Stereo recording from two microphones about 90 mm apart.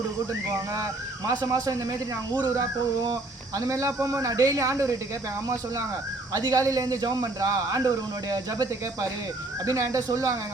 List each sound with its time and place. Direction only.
0.7 s a man's voice: 35° right (ahead or behind)
6.3 s a man's voice: 45° right (ahead or behind)